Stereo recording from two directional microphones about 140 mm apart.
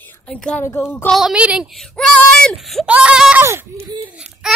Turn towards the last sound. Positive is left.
turn(degrees=-5)  # may be behind; listen again after turning